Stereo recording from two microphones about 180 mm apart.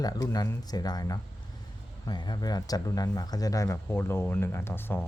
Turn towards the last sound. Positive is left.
turn(degrees=10)  # may be behind; listen again after turning